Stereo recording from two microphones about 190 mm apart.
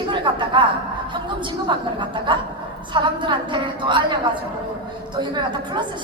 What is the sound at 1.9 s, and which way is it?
A woman's voice, 25° right (ahead or behind).